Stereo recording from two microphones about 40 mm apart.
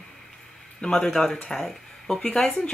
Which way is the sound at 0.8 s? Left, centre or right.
Centre.